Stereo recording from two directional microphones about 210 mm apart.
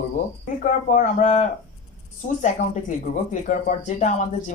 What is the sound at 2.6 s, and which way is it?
Speech, 35° left (ahead or behind).